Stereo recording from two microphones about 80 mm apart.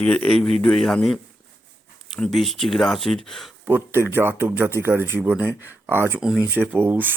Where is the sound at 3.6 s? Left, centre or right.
Right.